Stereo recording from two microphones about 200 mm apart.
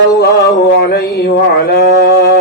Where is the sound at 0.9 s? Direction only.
50° left (ahead or behind).